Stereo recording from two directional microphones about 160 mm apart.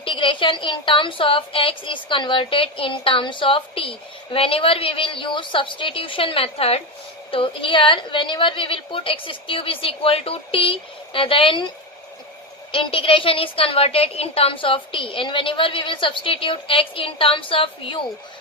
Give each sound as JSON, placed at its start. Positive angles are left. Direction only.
{"t": 0.0, "sound": "a woman's voice", "side_deg": 30}
{"t": 12.7, "sound": "a woman's voice", "side_deg": 35}